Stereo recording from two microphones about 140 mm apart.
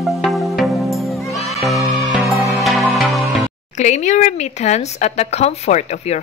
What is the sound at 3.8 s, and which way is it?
Speech, 55° left (ahead or behind).